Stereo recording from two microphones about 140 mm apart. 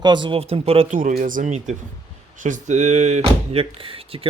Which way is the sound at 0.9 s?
75° right (ahead or behind).